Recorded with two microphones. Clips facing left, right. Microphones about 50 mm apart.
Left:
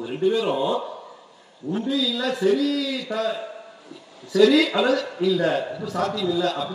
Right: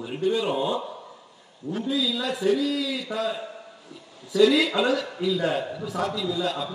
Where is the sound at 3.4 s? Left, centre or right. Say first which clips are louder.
Left 3 dB; centre.